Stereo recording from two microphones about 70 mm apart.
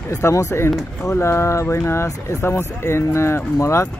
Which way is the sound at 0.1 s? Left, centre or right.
Left.